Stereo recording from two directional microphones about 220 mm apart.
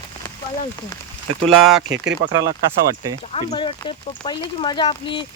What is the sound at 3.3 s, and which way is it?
Speech, 25° left (ahead or behind).